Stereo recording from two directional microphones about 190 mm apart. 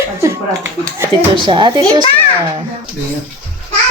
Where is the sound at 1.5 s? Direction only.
25° right (ahead or behind).